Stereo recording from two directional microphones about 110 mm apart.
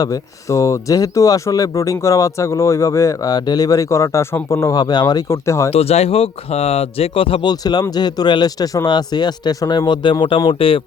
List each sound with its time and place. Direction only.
0.0 s speech: 30° left (ahead or behind)
5.3 s speech: 25° left (ahead or behind)
5.7 s speech: 70° left (ahead or behind)
7.6 s speech: 40° left (ahead or behind); by 10.8 s 55° left (ahead or behind)